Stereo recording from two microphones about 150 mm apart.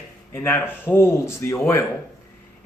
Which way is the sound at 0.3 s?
15° left (ahead or behind).